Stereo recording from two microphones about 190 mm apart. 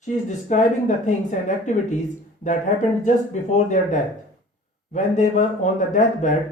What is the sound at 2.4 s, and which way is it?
Speech, 40° left (ahead or behind).